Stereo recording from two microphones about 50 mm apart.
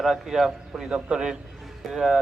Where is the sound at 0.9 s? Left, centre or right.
Centre.